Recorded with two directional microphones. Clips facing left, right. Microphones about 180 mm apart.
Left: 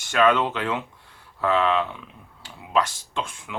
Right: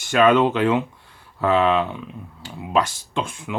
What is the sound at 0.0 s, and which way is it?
Speech, 10° right (ahead or behind).